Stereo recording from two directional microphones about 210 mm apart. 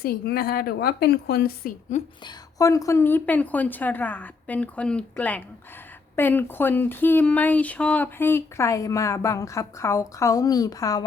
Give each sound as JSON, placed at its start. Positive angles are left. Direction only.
{"t": 0.0, "sound": "a woman's voice", "side_deg": 45}
{"t": 2.2, "sound": "speech", "side_deg": 15}